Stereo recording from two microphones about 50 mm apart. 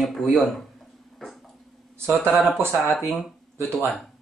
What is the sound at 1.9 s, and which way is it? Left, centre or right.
Speech, right.